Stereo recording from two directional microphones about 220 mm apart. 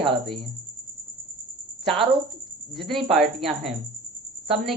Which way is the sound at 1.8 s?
Centre (ahead or behind).